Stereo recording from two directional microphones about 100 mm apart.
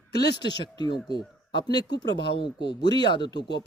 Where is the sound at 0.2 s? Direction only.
45° left (ahead or behind).